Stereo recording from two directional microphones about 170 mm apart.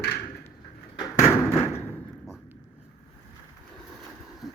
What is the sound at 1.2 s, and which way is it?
Thump, 15° left (ahead or behind).